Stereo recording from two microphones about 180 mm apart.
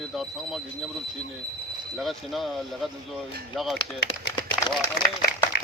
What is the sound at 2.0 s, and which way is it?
Speech, centre (ahead or behind).